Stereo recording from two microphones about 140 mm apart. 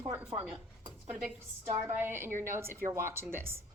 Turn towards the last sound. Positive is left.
turn(degrees=-15)  # may be behind; listen again after turning